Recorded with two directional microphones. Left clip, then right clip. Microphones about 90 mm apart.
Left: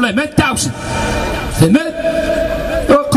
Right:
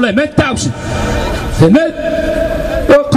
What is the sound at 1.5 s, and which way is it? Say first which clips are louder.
Speech: right 4 dB; 25° left (ahead or behind).